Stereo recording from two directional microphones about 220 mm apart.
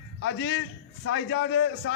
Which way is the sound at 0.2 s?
55° left (ahead or behind).